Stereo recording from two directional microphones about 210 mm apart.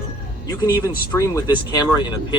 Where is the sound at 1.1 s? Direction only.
15° left (ahead or behind).